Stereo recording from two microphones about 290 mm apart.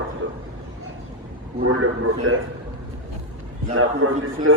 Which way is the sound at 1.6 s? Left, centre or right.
Right.